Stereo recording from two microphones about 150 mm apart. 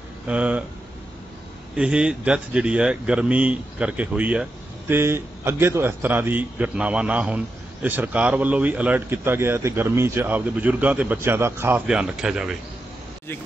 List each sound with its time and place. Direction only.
0.3 s speech: 10° right (ahead or behind)
1.8 s speech: 5° right (ahead or behind)
11.9 s speech: 5° right (ahead or behind)